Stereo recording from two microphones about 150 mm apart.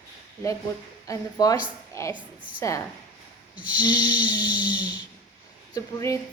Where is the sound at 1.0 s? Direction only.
25° left (ahead or behind).